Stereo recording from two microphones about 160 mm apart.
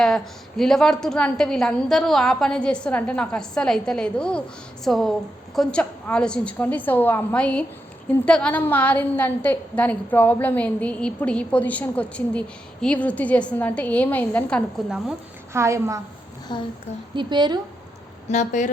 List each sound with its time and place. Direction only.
0.0 s a woman's voice: 5° left (ahead or behind)
14.8 s a woman's voice: 5° right (ahead or behind)
15.5 s a woman's voice: 20° right (ahead or behind)
16.5 s a child's voice: 25° left (ahead or behind)
17.2 s a woman's voice: 30° right (ahead or behind)
18.3 s speech: 50° left (ahead or behind)